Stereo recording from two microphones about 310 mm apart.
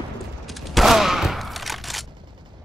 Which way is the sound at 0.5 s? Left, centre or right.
Centre.